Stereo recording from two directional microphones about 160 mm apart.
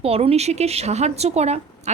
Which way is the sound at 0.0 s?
40° right (ahead or behind).